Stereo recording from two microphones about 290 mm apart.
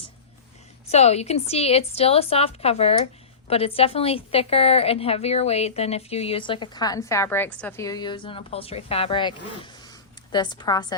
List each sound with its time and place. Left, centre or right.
0.9 s a woman's voice: left
10.3 s a woman's voice: centre